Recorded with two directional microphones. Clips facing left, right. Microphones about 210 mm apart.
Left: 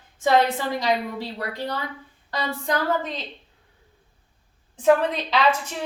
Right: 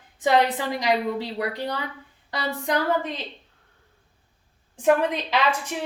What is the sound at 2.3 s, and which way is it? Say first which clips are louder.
Speech: even; 15° right (ahead or behind).